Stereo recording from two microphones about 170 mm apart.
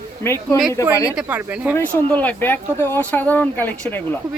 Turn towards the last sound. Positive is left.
turn(degrees=10)  # may be behind; listen again after turning